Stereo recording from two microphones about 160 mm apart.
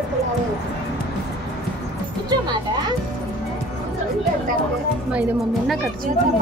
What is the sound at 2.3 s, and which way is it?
Speech, 25° right (ahead or behind).